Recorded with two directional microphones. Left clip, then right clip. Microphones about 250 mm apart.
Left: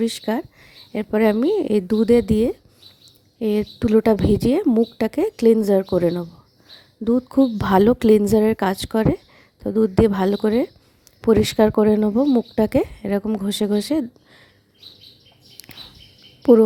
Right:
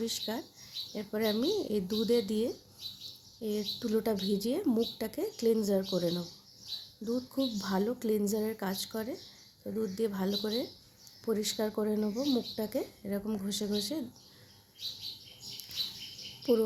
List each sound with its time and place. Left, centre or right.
0.0 s speech: left